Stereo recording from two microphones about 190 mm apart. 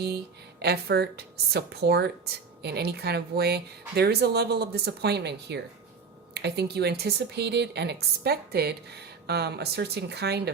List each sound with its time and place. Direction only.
0.6 s a woman's voice: 60° right (ahead or behind)